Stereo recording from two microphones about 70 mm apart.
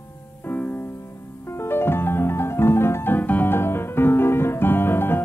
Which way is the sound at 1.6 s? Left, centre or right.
Left.